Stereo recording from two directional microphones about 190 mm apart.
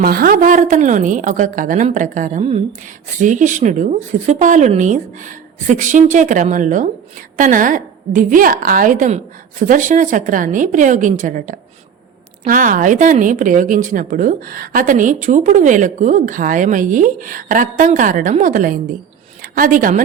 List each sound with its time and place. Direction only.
0.0 s a woman's voice: 50° right (ahead or behind)